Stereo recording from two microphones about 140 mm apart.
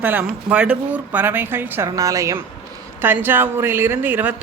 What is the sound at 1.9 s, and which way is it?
A woman's voice, 25° right (ahead or behind).